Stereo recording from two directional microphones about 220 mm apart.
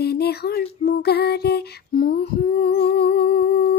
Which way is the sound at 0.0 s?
45° left (ahead or behind).